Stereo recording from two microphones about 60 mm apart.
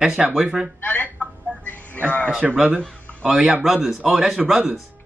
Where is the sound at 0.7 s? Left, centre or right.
Left.